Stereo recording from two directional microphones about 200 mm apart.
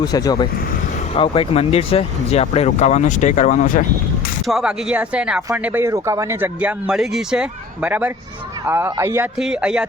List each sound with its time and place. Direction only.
0.0 s speech: 20° left (ahead or behind); by 3.8 s 40° left (ahead or behind)
4.4 s speech: 5° right (ahead or behind)